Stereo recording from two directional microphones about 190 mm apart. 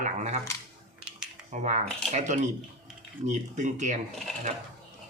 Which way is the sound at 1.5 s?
40° right (ahead or behind).